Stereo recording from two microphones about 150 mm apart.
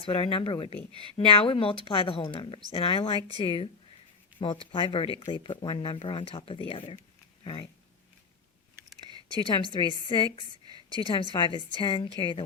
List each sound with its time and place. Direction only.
0.0 s speech: 35° left (ahead or behind)
9.0 s a sound: 30° right (ahead or behind)
9.7 s a woman's voice: 30° left (ahead or behind)
11.0 s speech: 30° left (ahead or behind)